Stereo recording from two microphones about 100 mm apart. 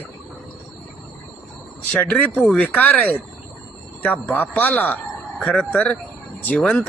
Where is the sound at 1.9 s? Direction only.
10° left (ahead or behind).